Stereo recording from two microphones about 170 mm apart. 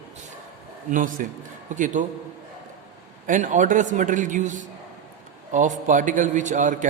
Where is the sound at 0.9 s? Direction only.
50° right (ahead or behind).